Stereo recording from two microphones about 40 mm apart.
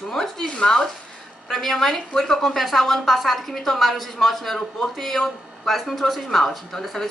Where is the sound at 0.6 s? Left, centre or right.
Left.